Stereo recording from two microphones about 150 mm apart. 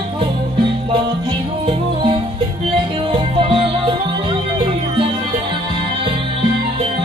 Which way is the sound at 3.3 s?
35° right (ahead or behind).